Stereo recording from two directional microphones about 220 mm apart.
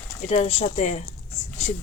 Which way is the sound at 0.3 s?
30° left (ahead or behind).